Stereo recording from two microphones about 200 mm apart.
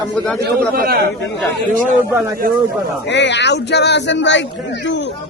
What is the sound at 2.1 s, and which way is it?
Speech, 10° right (ahead or behind).